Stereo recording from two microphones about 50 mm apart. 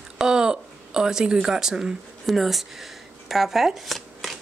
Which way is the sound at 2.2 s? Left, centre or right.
Centre.